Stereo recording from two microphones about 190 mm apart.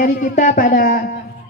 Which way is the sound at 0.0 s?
45° left (ahead or behind).